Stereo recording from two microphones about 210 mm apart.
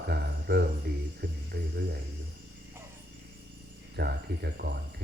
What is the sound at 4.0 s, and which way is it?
Speech, 50° right (ahead or behind).